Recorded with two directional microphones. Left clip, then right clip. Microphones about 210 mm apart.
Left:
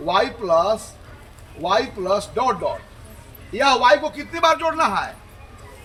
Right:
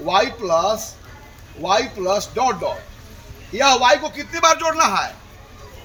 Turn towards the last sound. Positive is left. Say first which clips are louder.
# right 2 dB
turn(degrees=-20)  # may be behind; listen again after turning